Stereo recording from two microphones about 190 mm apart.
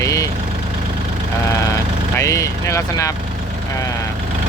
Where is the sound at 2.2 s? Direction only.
15° left (ahead or behind).